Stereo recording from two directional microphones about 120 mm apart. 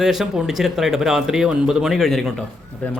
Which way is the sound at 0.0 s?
5° right (ahead or behind).